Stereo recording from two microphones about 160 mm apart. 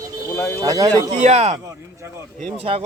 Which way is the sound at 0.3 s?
15° left (ahead or behind).